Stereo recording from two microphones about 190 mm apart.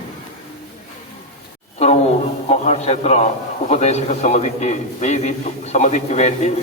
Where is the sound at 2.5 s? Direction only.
35° left (ahead or behind).